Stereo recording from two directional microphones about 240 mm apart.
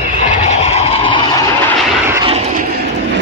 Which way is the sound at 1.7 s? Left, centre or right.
Centre.